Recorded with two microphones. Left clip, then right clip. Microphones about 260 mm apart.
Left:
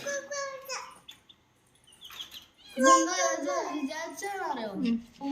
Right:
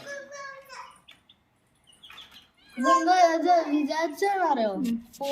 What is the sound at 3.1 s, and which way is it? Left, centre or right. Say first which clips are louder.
A child's voice: right 10 dB; right.